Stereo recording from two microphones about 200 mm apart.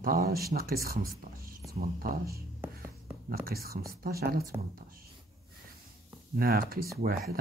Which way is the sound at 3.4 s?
50° right (ahead or behind).